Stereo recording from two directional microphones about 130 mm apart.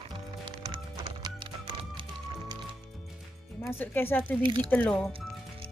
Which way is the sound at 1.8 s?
40° right (ahead or behind).